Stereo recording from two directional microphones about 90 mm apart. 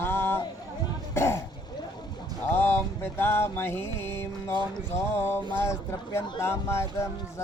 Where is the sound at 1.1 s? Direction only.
30° left (ahead or behind).